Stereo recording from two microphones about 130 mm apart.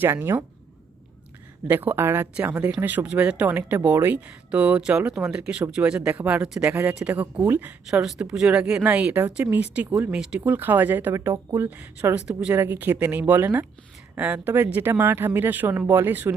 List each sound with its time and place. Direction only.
0.0 s speech: 15° right (ahead or behind)
1.6 s speech: 15° right (ahead or behind)
7.9 s speech: 5° right (ahead or behind)